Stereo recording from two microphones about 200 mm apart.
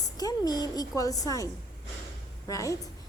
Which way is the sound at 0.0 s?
20° left (ahead or behind).